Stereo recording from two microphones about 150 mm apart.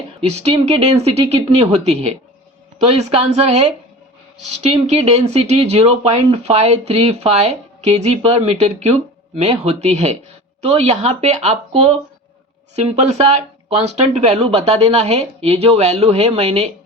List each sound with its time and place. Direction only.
0.2 s speech: 45° right (ahead or behind)
4.6 s speech: 45° right (ahead or behind)